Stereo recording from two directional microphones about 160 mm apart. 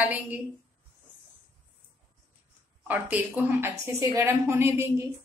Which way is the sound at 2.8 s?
10° right (ahead or behind).